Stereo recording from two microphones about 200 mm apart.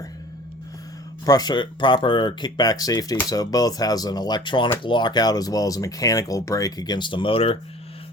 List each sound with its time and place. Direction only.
1.2 s speech: 20° left (ahead or behind)